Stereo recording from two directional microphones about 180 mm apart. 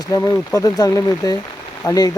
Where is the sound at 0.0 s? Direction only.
20° left (ahead or behind).